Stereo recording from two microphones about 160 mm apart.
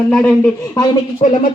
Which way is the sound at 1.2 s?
45° left (ahead or behind).